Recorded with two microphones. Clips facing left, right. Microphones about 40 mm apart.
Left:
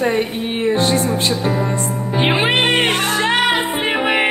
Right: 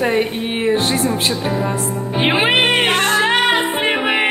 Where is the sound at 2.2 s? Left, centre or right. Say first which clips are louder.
Right 1 dB; centre.